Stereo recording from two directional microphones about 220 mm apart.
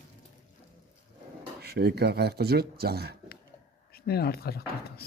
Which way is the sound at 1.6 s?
45° right (ahead or behind).